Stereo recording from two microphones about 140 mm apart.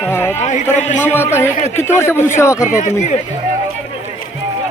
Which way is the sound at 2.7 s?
55° left (ahead or behind).